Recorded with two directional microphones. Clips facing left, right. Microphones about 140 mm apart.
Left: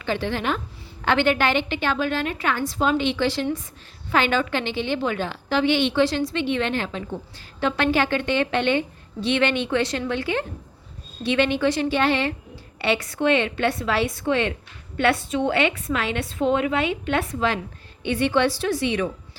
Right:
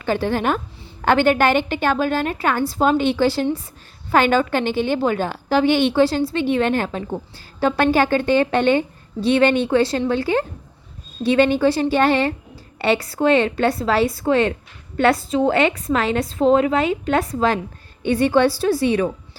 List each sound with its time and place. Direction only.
0.0 s a woman's voice: 45° right (ahead or behind)